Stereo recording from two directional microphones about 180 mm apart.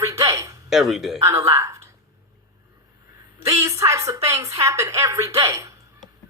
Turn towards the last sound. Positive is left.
turn(degrees=-15)  # may be behind; listen again after turning